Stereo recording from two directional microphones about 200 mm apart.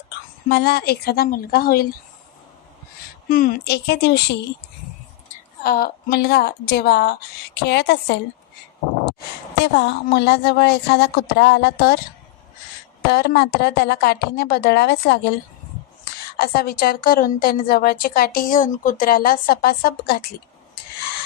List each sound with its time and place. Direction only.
0.4 s a woman's voice: 55° left (ahead or behind)
3.2 s a woman's voice: 45° left (ahead or behind)
5.6 s a woman's voice: 45° left (ahead or behind)
9.6 s a woman's voice: 55° left (ahead or behind)
13.1 s a woman's voice: 55° left (ahead or behind)
16.4 s a woman's voice: 50° left (ahead or behind)